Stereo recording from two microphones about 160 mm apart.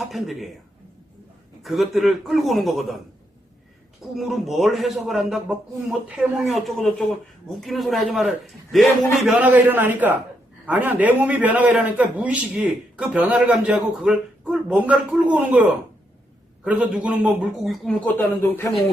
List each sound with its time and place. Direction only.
0.0 s a man's voice: centre (ahead or behind)
1.6 s a man's voice: centre (ahead or behind)
4.1 s a man's voice: centre (ahead or behind)
18.4 s speech: 20° left (ahead or behind)